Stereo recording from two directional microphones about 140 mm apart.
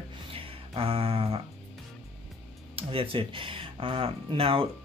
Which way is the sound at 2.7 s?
40° right (ahead or behind).